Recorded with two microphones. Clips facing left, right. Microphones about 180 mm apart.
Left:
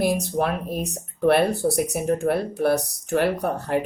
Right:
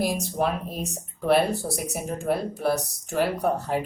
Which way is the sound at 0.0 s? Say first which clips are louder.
Left 3 dB; 60° left (ahead or behind).